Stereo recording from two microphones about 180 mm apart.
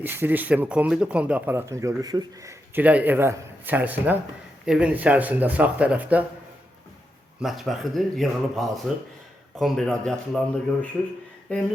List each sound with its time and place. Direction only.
0.0 s speech: 10° right (ahead or behind)
7.4 s speech: centre (ahead or behind)
11.5 s speech: 5° left (ahead or behind)